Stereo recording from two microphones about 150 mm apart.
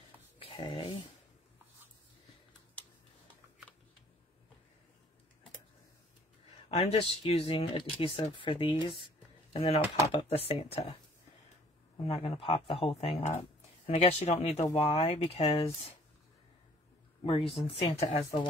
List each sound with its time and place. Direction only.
0.4 s a sound: 35° left (ahead or behind)
6.8 s speech: 40° left (ahead or behind)
12.1 s speech: 35° left (ahead or behind)
17.2 s speech: 40° left (ahead or behind)